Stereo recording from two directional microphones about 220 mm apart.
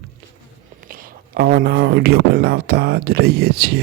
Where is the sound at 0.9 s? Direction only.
40° right (ahead or behind).